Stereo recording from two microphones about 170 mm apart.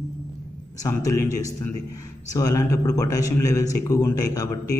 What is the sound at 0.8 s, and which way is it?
A man's voice, 20° left (ahead or behind).